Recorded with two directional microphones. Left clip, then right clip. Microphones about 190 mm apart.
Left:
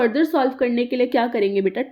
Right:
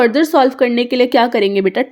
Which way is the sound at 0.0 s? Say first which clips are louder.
Right 7 dB; 35° right (ahead or behind).